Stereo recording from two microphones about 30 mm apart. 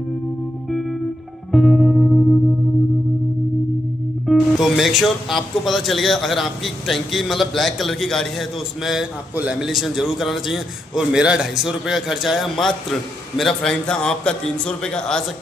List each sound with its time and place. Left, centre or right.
1.5 s music: centre
4.3 s speech: centre
9.6 s a man's voice: centre
11.0 s a man's voice: right
13.4 s a man's voice: centre
14.0 s speech: left